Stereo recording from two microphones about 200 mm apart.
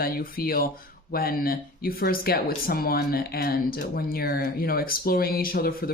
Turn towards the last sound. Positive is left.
turn(degrees=50)  # may be behind; listen again after turning